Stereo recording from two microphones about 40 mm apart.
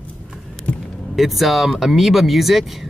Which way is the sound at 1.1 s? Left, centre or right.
Centre.